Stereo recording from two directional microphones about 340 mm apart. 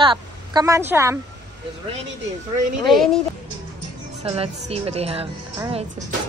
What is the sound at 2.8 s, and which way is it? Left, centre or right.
Speech, centre.